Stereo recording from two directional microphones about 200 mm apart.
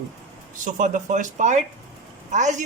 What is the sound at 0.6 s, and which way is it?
Speech, 40° right (ahead or behind).